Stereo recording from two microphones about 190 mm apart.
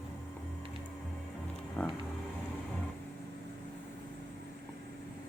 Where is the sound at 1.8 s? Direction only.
5° left (ahead or behind).